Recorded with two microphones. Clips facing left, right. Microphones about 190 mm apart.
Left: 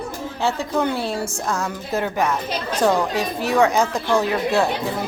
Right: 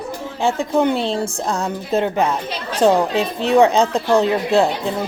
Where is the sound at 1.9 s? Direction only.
20° right (ahead or behind).